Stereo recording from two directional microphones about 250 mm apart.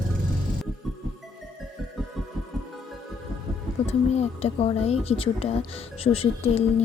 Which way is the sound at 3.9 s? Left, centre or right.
Left.